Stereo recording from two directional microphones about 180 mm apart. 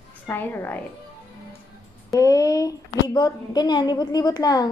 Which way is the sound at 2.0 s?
20° left (ahead or behind).